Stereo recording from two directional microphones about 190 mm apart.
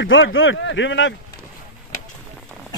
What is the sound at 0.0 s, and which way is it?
Speech, 90° left.